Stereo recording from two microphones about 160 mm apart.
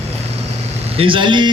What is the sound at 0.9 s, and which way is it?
Speech, 35° right (ahead or behind).